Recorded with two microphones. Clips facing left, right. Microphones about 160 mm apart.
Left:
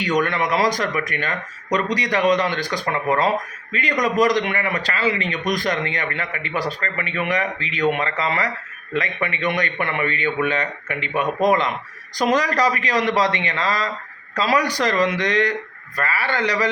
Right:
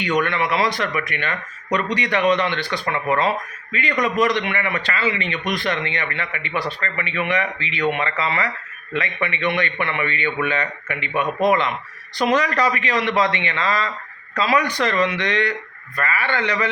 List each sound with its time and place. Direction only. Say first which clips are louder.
0.0 s speech: even; 40° left (ahead or behind)